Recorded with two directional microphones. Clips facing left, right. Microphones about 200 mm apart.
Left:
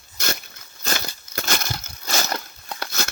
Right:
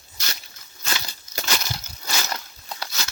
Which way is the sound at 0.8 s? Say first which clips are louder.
Left 4 dB; 50° left (ahead or behind).